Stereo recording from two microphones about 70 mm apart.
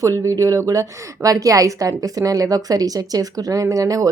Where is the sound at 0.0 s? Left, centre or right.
Right.